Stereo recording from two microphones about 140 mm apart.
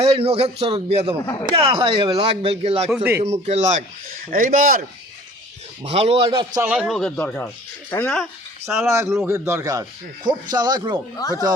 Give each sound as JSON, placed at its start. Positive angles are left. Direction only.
{"t": 0.0, "sound": "a man's voice", "side_deg": -45}
{"t": 1.2, "sound": "speech", "side_deg": 25}
{"t": 1.5, "sound": "speech", "side_deg": -40}
{"t": 2.9, "sound": "speech", "side_deg": -10}
{"t": 3.4, "sound": "speech", "side_deg": -55}
{"t": 4.3, "sound": "speech", "side_deg": -75}
{"t": 5.8, "sound": "speech", "side_deg": -45}
{"t": 6.7, "sound": "speech", "side_deg": 0}
{"t": 8.9, "sound": "a man's voice", "side_deg": -20}
{"t": 10.5, "sound": "a man's voice", "side_deg": -30}
{"t": 11.2, "sound": "speech", "side_deg": 25}